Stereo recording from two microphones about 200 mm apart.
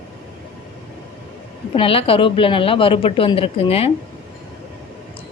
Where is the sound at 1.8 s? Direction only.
30° left (ahead or behind).